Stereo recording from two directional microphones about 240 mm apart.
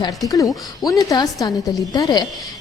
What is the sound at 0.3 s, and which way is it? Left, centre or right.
A woman's voice, centre.